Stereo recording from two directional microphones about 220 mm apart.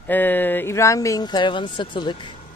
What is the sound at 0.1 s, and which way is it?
Speech, 10° left (ahead or behind).